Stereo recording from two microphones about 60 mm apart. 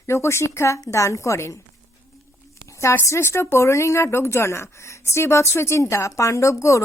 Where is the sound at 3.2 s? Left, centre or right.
Left.